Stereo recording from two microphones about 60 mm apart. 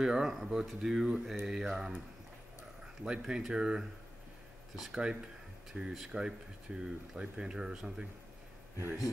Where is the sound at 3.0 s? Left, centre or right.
Centre.